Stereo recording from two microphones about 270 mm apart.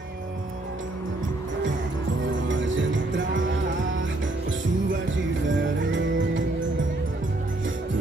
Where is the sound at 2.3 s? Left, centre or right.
Right.